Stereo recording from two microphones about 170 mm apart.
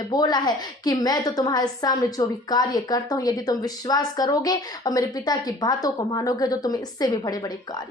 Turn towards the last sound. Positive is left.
turn(degrees=20)  # may be behind; listen again after turning